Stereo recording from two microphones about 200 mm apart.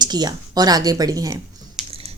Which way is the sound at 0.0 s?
20° right (ahead or behind).